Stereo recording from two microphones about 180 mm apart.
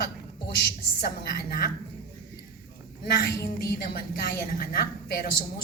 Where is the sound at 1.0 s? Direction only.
60° left (ahead or behind).